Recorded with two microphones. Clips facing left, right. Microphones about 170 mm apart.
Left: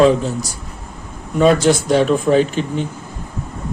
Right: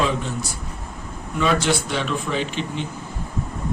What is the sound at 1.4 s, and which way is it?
Speech, 45° left (ahead or behind).